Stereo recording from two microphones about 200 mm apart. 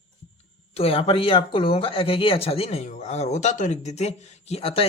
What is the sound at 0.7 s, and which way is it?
Speech, 30° left (ahead or behind).